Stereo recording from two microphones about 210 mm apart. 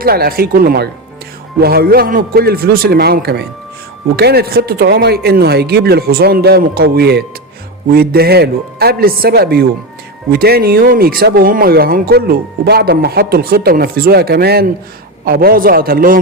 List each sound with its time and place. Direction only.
0.0 s speech: 45° right (ahead or behind)